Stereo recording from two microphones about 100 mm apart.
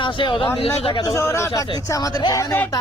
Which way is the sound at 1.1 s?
30° left (ahead or behind).